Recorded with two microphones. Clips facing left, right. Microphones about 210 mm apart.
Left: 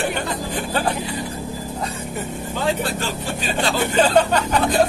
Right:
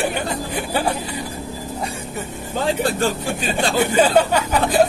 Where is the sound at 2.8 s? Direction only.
50° right (ahead or behind).